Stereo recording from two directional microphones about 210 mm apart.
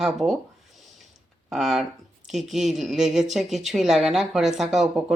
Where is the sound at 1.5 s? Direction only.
Centre (ahead or behind).